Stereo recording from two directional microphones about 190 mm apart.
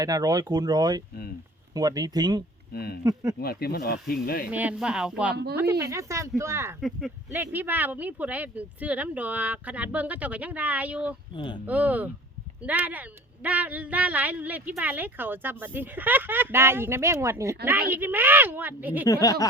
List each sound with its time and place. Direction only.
0.0 s speech: 20° right (ahead or behind)
2.7 s speech: 55° left (ahead or behind)
3.0 s speech: 20° right (ahead or behind)
3.4 s speech: 55° left (ahead or behind)
4.4 s speech: 5° right (ahead or behind)
5.8 s speech: 15° right (ahead or behind)
11.3 s speech: 25° left (ahead or behind)
11.6 s speech: 10° right (ahead or behind)
19.0 s speech: 20° left (ahead or behind)